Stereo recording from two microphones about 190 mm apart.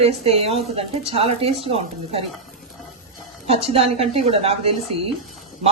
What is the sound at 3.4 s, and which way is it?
A woman's voice, 30° right (ahead or behind).